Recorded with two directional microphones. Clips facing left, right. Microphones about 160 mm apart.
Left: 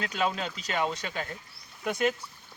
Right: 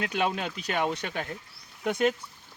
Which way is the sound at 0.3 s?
55° right (ahead or behind).